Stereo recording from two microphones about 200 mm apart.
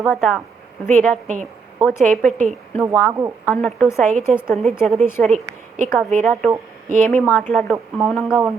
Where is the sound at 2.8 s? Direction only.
15° right (ahead or behind).